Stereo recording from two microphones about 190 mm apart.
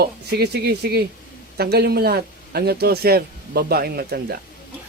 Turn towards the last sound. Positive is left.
turn(degrees=-55)  # may be behind; listen again after turning